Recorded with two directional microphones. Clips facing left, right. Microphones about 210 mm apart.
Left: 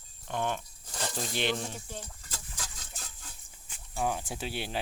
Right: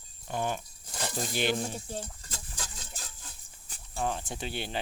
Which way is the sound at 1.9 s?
35° right (ahead or behind).